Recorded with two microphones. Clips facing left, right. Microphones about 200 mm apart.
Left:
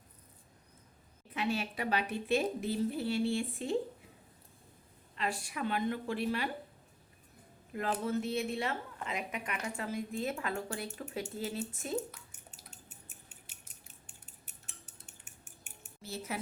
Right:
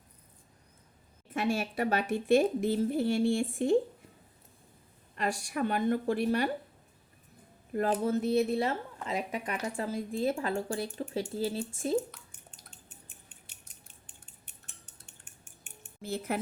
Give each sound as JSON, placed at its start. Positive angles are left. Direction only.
{"t": 1.3, "sound": "speech", "side_deg": -45}
{"t": 5.1, "sound": "speech", "side_deg": -45}
{"t": 7.7, "sound": "a woman's voice", "side_deg": -40}
{"t": 12.1, "sound": "drip", "side_deg": 5}
{"t": 15.0, "sound": "cutlery", "side_deg": 5}
{"t": 16.0, "sound": "speech", "side_deg": -55}